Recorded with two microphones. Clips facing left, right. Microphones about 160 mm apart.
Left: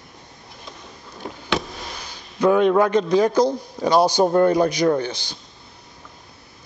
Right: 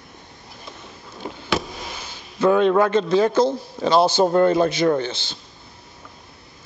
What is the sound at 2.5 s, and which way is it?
Speech, 10° left (ahead or behind).